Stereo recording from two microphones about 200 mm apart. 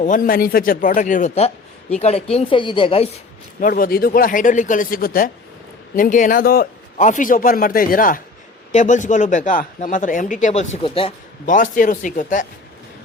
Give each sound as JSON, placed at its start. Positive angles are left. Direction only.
{"t": 0.0, "sound": "speech", "side_deg": 40}
{"t": 3.6, "sound": "a man's voice", "side_deg": 45}
{"t": 11.4, "sound": "speech", "side_deg": 40}